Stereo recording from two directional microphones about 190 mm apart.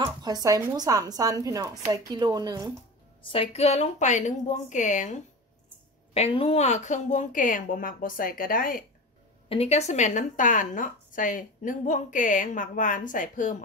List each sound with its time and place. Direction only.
0.0 s speech: 20° right (ahead or behind)
3.3 s speech: 30° left (ahead or behind)
6.1 s a woman's voice: 30° left (ahead or behind); by 8.8 s 50° left (ahead or behind)
9.5 s speech: 35° left (ahead or behind)